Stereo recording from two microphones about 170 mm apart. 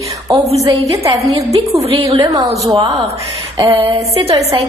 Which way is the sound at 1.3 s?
20° right (ahead or behind).